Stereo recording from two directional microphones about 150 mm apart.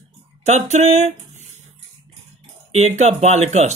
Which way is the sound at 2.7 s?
50° right (ahead or behind).